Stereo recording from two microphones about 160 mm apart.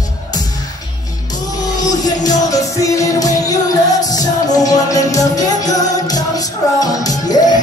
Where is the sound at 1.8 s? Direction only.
25° left (ahead or behind).